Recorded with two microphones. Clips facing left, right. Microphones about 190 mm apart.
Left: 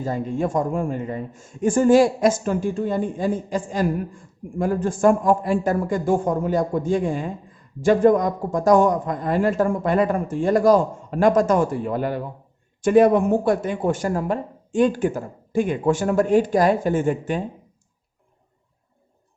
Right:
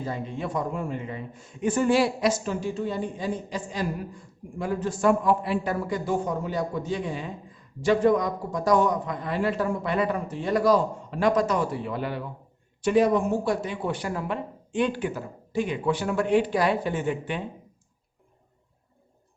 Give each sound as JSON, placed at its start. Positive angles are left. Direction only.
{"t": 0.0, "sound": "a man's voice", "side_deg": 45}